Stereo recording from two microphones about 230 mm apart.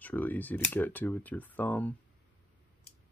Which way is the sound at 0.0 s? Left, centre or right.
Centre.